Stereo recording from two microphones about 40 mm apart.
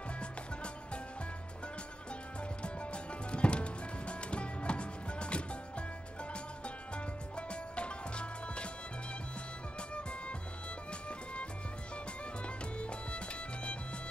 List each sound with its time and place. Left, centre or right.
2.6 s music: left
7.3 s music: left
12.7 s music: left